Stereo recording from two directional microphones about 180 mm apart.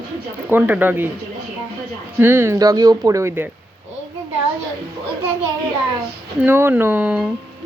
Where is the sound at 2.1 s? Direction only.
15° right (ahead or behind).